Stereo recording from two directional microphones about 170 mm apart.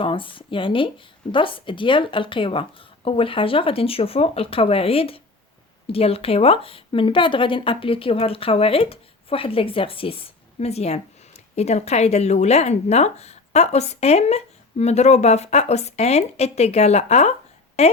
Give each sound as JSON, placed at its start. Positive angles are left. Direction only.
{"t": 0.0, "sound": "a woman's voice", "side_deg": 30}